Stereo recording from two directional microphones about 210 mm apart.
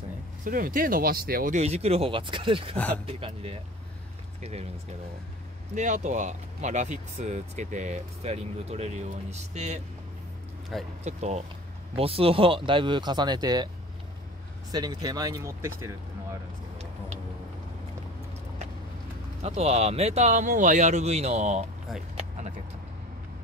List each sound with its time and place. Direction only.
0.5 s speech: 40° right (ahead or behind)
5.8 s speech: 35° right (ahead or behind)
10.7 s speech: centre (ahead or behind)
11.1 s speech: 35° right (ahead or behind)
14.7 s speech: 20° right (ahead or behind)
19.4 s speech: 30° right (ahead or behind)